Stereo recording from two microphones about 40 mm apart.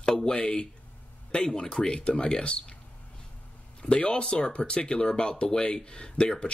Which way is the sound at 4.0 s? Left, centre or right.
Left.